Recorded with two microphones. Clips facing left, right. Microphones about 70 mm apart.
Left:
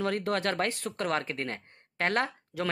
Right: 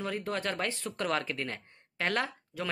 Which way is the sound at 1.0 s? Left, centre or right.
Left.